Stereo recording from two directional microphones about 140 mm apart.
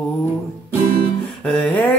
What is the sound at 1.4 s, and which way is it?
Music, 10° left (ahead or behind).